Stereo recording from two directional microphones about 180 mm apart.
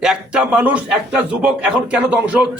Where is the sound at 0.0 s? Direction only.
5° right (ahead or behind).